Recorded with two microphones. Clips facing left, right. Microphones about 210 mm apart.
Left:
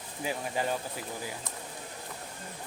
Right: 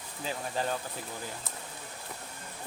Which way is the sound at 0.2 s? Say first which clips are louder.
Left 2 dB; 10° left (ahead or behind).